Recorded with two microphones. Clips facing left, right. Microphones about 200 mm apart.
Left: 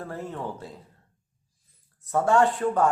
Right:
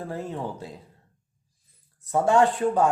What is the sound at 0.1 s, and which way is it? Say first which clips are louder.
Speech: right 2 dB; 15° right (ahead or behind).